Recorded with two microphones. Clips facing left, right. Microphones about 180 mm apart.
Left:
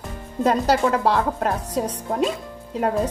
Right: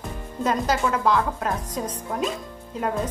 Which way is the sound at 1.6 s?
75° left (ahead or behind).